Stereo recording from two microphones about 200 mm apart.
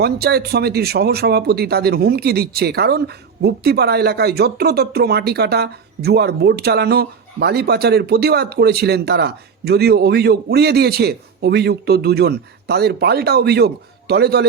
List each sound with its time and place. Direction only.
0.0 s speech: 55° right (ahead or behind)